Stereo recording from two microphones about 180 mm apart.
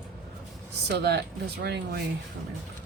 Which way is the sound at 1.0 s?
65° right (ahead or behind).